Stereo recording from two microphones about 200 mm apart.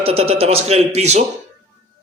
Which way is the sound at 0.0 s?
30° right (ahead or behind).